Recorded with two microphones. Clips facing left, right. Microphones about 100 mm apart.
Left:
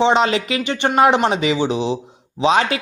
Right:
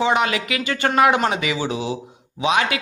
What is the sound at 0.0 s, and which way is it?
A man's voice, 30° left (ahead or behind).